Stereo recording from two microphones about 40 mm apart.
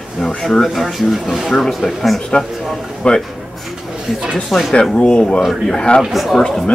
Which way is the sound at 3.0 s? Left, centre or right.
Left.